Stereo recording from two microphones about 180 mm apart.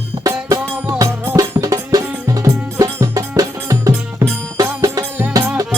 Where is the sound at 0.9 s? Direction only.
20° right (ahead or behind).